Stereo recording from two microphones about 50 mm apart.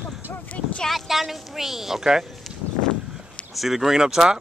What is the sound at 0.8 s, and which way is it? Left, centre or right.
Speech, centre.